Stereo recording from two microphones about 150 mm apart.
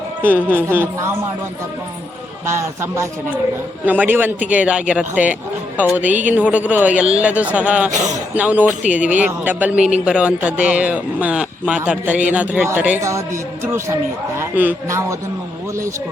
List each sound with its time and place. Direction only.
0.2 s a man's voice: 15° right (ahead or behind)
2.5 s a man's voice: 20° right (ahead or behind)
7.9 s speech: 55° right (ahead or behind)
8.4 s a man's voice: 10° right (ahead or behind)